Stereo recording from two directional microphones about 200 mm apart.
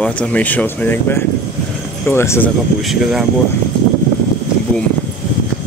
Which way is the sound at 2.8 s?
Centre (ahead or behind).